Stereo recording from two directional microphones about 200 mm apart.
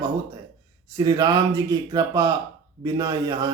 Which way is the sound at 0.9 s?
20° right (ahead or behind).